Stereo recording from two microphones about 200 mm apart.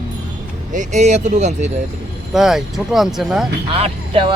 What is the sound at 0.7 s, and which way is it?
Speech, 35° right (ahead or behind).